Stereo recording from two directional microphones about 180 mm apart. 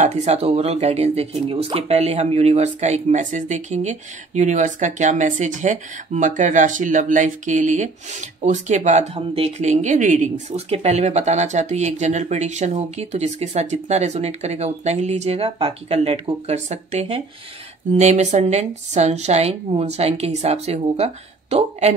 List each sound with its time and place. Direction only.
0.0 s speech: 40° right (ahead or behind)